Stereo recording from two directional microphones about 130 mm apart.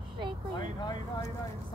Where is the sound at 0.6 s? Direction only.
35° left (ahead or behind).